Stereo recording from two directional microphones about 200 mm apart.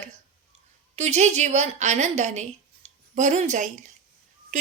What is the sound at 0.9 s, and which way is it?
A woman's voice, 35° right (ahead or behind).